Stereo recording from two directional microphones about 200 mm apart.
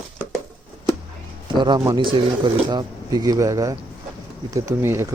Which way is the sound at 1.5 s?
20° right (ahead or behind).